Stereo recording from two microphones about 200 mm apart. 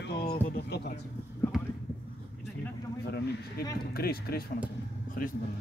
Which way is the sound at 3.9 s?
50° left (ahead or behind).